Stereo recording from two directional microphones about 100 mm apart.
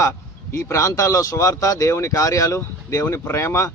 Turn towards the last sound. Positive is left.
turn(degrees=30)  # may be behind; listen again after turning